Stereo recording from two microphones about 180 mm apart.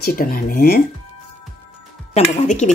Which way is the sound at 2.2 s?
40° left (ahead or behind).